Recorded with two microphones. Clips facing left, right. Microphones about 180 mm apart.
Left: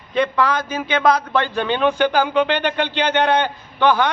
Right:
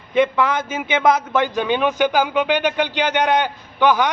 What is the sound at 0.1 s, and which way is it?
A man's voice, 20° right (ahead or behind).